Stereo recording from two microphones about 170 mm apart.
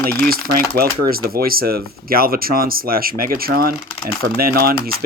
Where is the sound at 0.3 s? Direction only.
60° right (ahead or behind).